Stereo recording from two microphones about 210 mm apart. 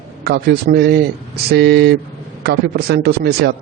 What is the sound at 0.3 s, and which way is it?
A man's voice, 50° right (ahead or behind).